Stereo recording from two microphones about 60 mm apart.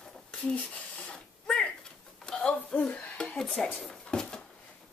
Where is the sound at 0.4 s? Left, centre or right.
Left.